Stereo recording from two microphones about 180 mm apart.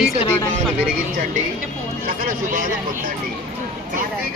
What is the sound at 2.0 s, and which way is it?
Speech, 45° right (ahead or behind).